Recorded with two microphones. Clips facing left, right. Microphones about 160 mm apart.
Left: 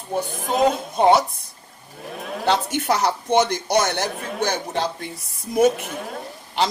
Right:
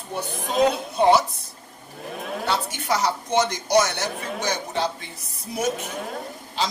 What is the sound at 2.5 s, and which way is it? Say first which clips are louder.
A man's voice: left 5 dB; 60° left (ahead or behind).